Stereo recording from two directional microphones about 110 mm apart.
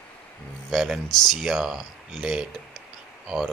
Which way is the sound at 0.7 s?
5° right (ahead or behind).